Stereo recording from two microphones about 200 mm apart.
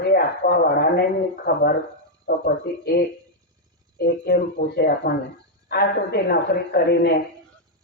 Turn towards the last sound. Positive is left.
turn(degrees=55)  # may be behind; listen again after turning